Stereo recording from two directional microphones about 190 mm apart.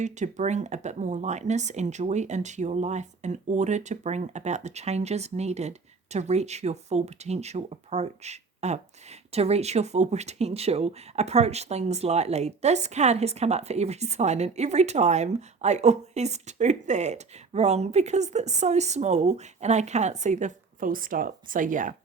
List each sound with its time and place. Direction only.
0.0 s speech: 40° right (ahead or behind)